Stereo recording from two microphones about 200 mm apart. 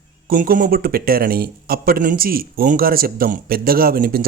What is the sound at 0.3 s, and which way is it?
A man's voice, 45° right (ahead or behind).